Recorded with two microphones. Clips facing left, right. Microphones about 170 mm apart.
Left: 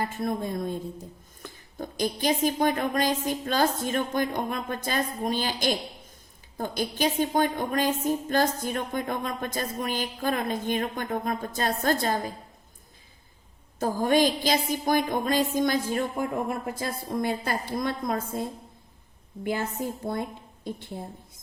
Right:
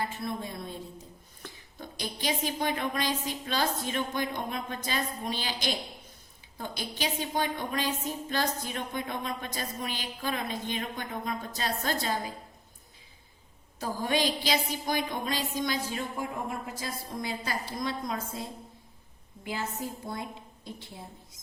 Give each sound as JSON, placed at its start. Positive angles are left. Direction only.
{"t": 0.0, "sound": "a woman's voice", "side_deg": 50}
{"t": 13.7, "sound": "a woman's voice", "side_deg": 50}
{"t": 19.5, "sound": "a woman's voice", "side_deg": 55}